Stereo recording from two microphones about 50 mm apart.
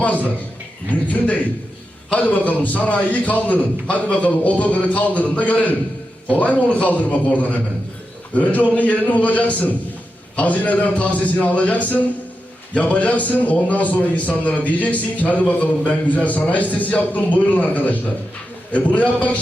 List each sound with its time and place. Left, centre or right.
0.0 s a man's voice: left
2.1 s a man's voice: left